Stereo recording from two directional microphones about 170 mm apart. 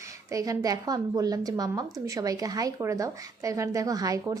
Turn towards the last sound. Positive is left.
turn(degrees=-20)  # may be behind; listen again after turning